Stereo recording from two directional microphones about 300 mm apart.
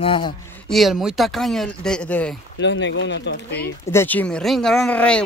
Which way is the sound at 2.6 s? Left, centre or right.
Left.